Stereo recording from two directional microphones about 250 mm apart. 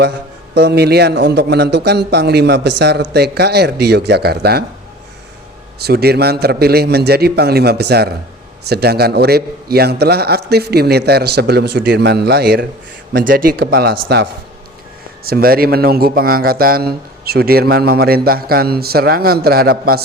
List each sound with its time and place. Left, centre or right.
0.5 s a man's voice: right
5.8 s a man's voice: right
15.2 s a man's voice: right